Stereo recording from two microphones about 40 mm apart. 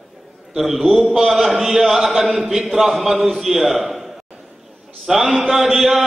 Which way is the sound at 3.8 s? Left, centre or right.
Centre.